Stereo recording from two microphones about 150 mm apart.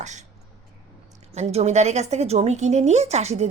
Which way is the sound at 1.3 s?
45° right (ahead or behind).